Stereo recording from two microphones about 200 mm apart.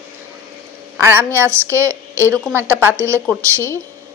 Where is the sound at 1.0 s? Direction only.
10° right (ahead or behind).